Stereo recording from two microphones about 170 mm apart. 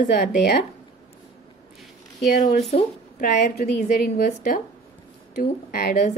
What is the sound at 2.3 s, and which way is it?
Speech, 60° left (ahead or behind).